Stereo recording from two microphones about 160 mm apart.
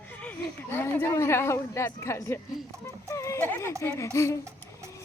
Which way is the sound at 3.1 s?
20° left (ahead or behind).